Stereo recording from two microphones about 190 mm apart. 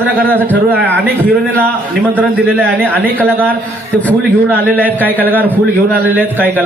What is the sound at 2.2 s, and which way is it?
Speech, 10° right (ahead or behind).